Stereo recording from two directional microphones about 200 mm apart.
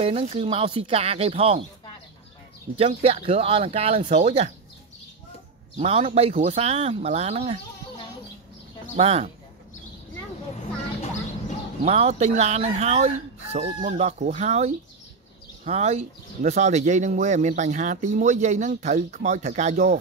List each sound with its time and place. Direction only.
0.0 s speech: 30° right (ahead or behind)
2.8 s speech: 30° right (ahead or behind)
5.8 s speech: 30° right (ahead or behind)
8.9 s speech: 30° right (ahead or behind)
11.8 s speech: 30° right (ahead or behind)